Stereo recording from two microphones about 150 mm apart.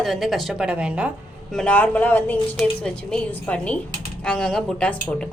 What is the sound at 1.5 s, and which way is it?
A woman's voice, 10° left (ahead or behind).